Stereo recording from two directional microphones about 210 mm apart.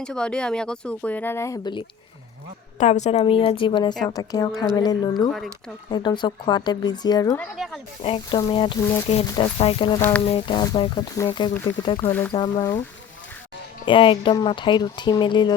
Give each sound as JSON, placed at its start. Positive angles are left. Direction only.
{"t": 0.0, "sound": "speech", "side_deg": 5}
{"t": 2.7, "sound": "speech", "side_deg": 35}
{"t": 7.3, "sound": "speech", "side_deg": 0}
{"t": 8.0, "sound": "speech", "side_deg": 25}
{"t": 10.0, "sound": "speech", "side_deg": 5}
{"t": 10.2, "sound": "speech", "side_deg": 25}
{"t": 12.0, "sound": "speech", "side_deg": 10}
{"t": 12.3, "sound": "speech", "side_deg": 20}
{"t": 13.8, "sound": "speech", "side_deg": 25}